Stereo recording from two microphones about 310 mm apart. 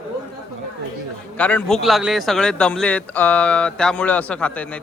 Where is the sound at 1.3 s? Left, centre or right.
Centre.